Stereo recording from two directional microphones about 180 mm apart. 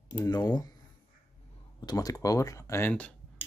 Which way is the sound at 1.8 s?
20° left (ahead or behind).